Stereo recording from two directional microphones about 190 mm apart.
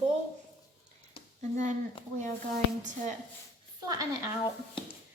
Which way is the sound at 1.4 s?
40° right (ahead or behind).